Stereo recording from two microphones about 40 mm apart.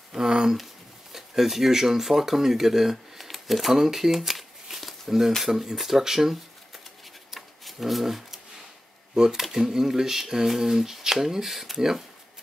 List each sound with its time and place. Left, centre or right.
0.1 s speech: centre
7.3 s a sound: centre
9.1 s speech: centre